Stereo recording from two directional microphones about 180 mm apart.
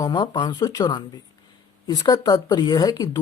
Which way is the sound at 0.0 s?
25° left (ahead or behind).